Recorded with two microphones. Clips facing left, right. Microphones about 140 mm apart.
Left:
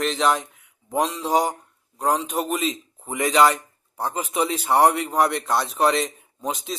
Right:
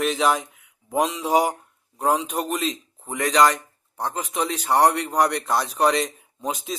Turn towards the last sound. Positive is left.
turn(degrees=0)  # may be behind; listen again after turning